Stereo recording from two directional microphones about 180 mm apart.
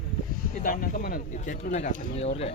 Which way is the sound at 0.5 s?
50° left (ahead or behind).